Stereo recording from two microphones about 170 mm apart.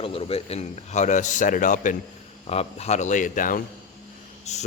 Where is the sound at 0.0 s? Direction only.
35° left (ahead or behind); by 2.0 s 50° left (ahead or behind).